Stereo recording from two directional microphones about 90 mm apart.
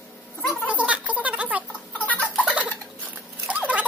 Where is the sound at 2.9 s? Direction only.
15° right (ahead or behind).